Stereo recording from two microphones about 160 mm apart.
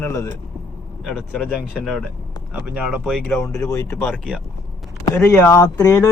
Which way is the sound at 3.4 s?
20° left (ahead or behind).